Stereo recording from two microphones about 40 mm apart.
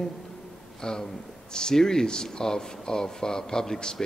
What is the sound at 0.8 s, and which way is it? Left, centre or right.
Speech, centre.